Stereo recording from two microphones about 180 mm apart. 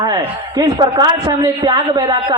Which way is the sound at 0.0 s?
20° right (ahead or behind).